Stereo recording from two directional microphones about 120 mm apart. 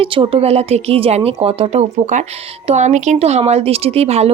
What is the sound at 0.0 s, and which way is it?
A woman's voice, 50° right (ahead or behind).